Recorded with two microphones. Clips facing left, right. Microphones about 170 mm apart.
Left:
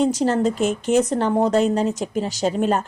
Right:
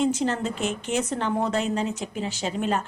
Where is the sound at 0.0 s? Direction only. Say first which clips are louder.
Left 6 dB; 40° left (ahead or behind).